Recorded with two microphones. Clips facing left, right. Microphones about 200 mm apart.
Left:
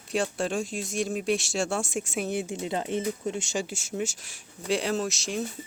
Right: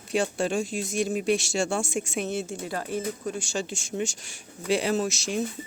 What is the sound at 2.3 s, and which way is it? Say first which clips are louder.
Speech: left 1 dB; 15° left (ahead or behind).